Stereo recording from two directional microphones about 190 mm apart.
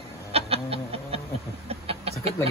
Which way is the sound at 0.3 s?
30° right (ahead or behind).